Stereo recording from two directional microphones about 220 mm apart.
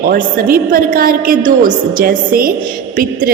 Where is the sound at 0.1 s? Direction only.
40° right (ahead or behind).